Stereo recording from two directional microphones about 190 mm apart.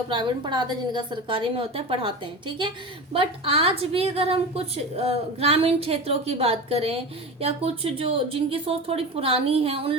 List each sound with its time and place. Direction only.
0.1 s a woman's voice: 25° right (ahead or behind)